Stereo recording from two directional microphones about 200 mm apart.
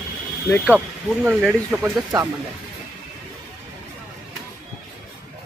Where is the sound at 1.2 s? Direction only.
5° right (ahead or behind).